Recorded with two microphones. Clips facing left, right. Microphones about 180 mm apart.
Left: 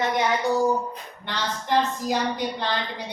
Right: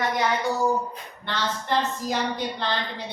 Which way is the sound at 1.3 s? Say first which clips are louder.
Left 1 dB; 15° left (ahead or behind).